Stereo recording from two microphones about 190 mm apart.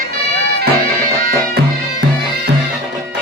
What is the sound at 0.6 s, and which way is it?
Music, 50° right (ahead or behind).